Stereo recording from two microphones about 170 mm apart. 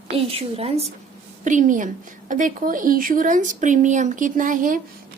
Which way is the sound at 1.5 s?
50° right (ahead or behind).